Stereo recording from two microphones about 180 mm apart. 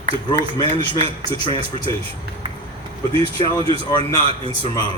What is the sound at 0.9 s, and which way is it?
Speech, 25° left (ahead or behind).